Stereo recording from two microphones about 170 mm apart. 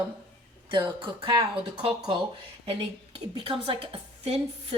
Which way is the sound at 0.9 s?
25° right (ahead or behind).